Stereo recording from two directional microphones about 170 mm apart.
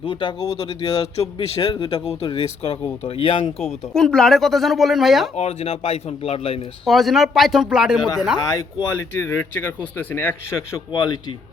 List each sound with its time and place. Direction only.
0.0 s speech: 30° left (ahead or behind)
3.6 s speech: centre (ahead or behind)
5.4 s speech: 35° left (ahead or behind)
6.8 s speech: centre (ahead or behind)
8.4 s speech: 15° left (ahead or behind)